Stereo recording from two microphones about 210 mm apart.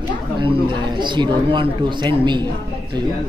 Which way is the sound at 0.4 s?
20° right (ahead or behind).